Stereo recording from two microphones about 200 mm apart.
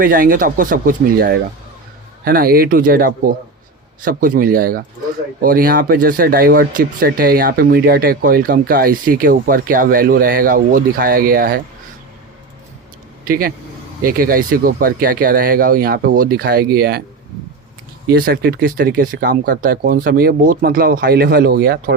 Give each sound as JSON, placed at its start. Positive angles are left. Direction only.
{"t": 0.0, "sound": "speech", "side_deg": -45}
{"t": 13.2, "sound": "speech", "side_deg": -45}
{"t": 18.1, "sound": "speech", "side_deg": -50}